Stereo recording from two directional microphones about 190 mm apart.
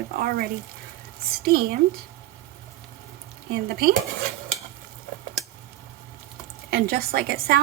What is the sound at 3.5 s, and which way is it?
Speech, 55° right (ahead or behind).